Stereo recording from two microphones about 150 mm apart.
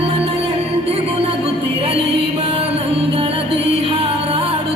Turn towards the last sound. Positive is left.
turn(degrees=-40)  # may be behind; listen again after turning